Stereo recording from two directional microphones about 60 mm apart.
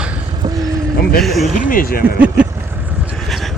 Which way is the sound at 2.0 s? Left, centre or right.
Right.